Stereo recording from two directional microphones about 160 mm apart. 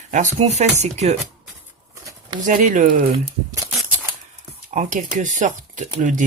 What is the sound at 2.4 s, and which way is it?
Speech, 55° right (ahead or behind).